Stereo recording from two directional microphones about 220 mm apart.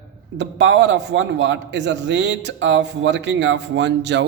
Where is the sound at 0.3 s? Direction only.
55° right (ahead or behind).